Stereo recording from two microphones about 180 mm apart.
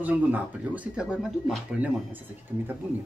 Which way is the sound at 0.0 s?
10° right (ahead or behind).